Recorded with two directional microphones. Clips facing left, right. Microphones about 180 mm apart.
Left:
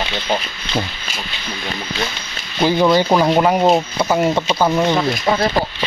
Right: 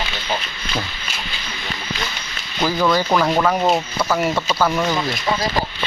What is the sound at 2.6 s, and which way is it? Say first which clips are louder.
Speech: left 4 dB; 25° left (ahead or behind).